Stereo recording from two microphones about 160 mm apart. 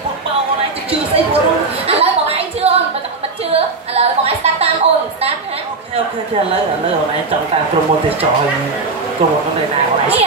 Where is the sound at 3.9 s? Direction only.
40° right (ahead or behind).